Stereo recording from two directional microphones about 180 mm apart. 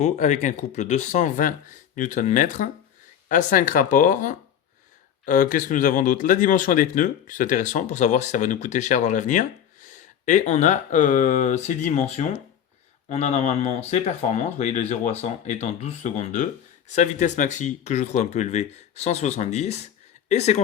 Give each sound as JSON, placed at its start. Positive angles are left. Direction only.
{"t": 0.0, "sound": "speech", "side_deg": 40}